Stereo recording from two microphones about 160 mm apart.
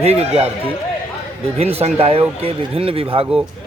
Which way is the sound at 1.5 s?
40° right (ahead or behind).